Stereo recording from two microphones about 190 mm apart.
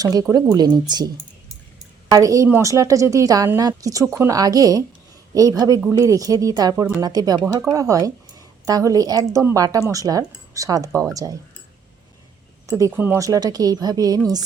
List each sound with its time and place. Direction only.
0.0 s speech: 20° right (ahead or behind)
2.0 s a woman's voice: 20° right (ahead or behind)
12.6 s a woman's voice: 15° right (ahead or behind)